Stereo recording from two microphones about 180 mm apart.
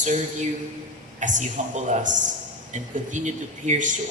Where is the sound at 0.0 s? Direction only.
40° right (ahead or behind).